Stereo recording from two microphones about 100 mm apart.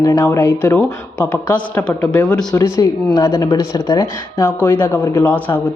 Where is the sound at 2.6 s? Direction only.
25° left (ahead or behind).